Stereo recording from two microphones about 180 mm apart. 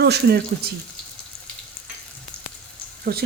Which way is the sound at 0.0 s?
65° right (ahead or behind).